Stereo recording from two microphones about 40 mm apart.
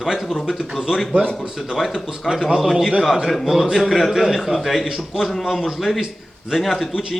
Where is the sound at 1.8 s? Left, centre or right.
Centre.